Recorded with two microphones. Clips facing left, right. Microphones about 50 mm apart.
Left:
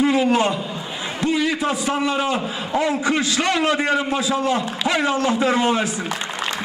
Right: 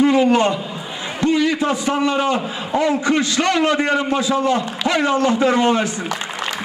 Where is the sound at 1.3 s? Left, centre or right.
Centre.